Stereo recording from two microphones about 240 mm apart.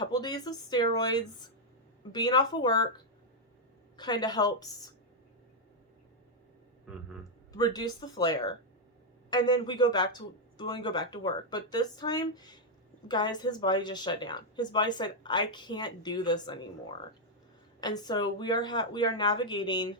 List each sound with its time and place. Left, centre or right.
0.0 s speech: centre
7.5 s speech: centre
17.7 s speech: centre